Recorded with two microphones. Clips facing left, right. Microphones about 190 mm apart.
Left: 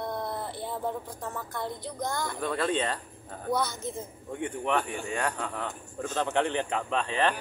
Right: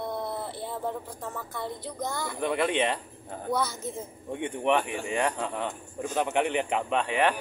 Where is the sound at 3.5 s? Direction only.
5° right (ahead or behind).